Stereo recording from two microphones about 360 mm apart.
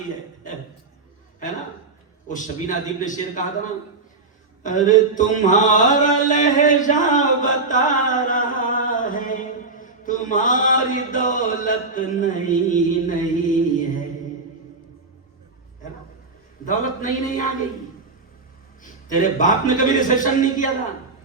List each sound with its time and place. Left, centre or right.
2.2 s a man's voice: left
4.6 s mantra: left
16.6 s a man's voice: left
18.8 s a man's voice: left